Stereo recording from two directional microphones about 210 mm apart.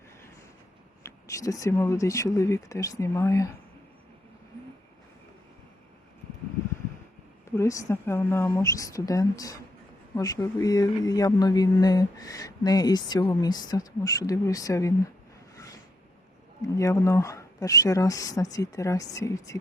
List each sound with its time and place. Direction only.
1.0 s speech: 15° left (ahead or behind)
7.4 s speech: 15° left (ahead or behind)
16.7 s speech: 15° left (ahead or behind)